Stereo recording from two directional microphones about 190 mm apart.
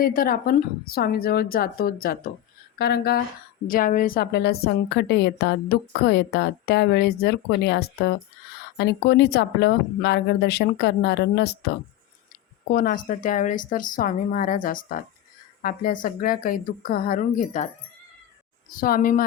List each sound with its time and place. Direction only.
0.0 s a woman's voice: 50° left (ahead or behind)
12.7 s a woman's voice: 50° left (ahead or behind)
18.8 s a woman's voice: 45° left (ahead or behind)